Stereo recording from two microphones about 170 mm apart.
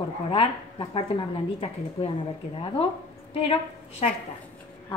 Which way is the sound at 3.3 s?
35° left (ahead or behind).